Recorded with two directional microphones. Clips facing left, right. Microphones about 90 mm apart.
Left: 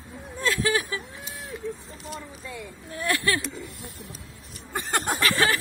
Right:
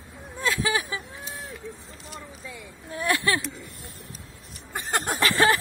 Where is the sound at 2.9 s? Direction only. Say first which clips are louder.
Right 1 dB; 20° right (ahead or behind).